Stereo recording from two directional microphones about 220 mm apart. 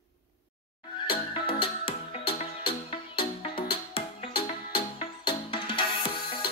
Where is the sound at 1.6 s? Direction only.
25° left (ahead or behind).